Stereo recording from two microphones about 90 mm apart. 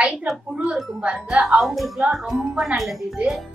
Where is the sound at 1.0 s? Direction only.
10° right (ahead or behind).